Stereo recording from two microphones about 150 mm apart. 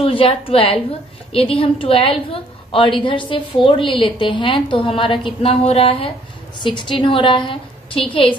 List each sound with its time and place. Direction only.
0.0 s a woman's voice: 40° left (ahead or behind)